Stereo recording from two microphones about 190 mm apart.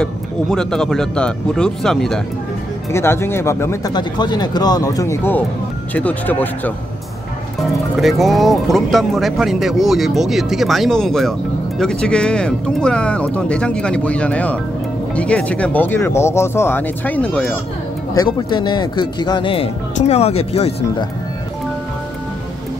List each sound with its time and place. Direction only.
0.0 s speech: 5° left (ahead or behind)
2.9 s speech: 15° left (ahead or behind)
7.9 s speech: centre (ahead or behind)
18.1 s speech: 20° left (ahead or behind)